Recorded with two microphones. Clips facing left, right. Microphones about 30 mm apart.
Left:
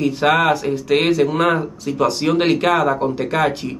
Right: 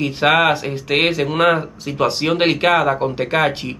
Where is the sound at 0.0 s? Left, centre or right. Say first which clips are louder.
Right 1 dB; right.